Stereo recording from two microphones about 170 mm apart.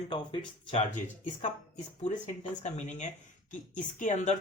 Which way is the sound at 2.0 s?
45° left (ahead or behind).